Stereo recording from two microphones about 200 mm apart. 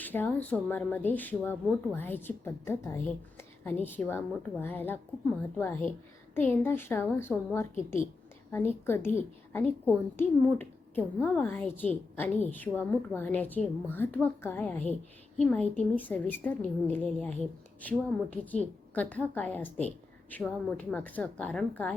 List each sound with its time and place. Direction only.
0.0 s speech: 10° left (ahead or behind)